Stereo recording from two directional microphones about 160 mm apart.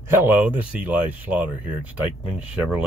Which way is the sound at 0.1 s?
10° right (ahead or behind).